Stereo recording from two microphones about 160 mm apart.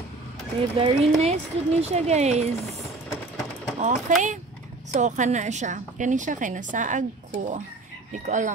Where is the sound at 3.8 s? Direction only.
50° right (ahead or behind).